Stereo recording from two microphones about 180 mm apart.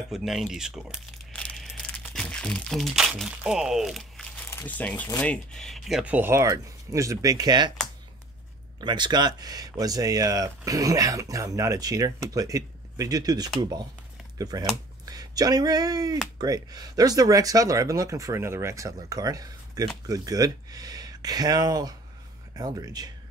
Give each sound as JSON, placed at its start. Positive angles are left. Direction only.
{"t": 0.1, "sound": "speech", "side_deg": 0}
{"t": 4.5, "sound": "speech", "side_deg": 10}
{"t": 8.8, "sound": "speech", "side_deg": -25}